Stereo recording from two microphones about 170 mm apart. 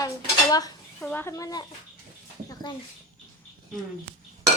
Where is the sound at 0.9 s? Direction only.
10° left (ahead or behind).